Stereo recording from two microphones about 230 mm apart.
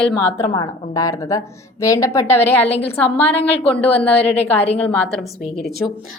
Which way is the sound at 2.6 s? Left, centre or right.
Left.